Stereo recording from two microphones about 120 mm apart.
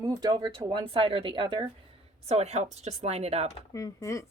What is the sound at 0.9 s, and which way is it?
Speech, 50° right (ahead or behind).